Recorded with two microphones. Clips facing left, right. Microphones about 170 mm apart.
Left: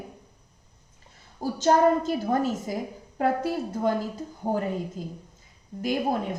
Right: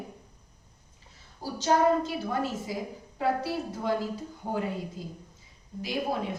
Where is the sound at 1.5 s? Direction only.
45° left (ahead or behind).